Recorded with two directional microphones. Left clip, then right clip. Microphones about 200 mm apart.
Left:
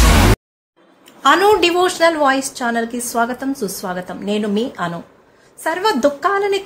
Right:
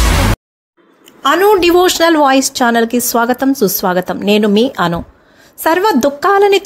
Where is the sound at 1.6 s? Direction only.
40° right (ahead or behind).